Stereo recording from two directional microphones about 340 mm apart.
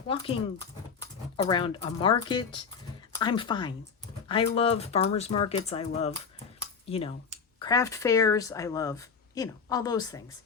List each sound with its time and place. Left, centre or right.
0.1 s speech: centre